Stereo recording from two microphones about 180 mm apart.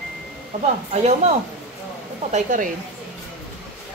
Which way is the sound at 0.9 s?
40° right (ahead or behind).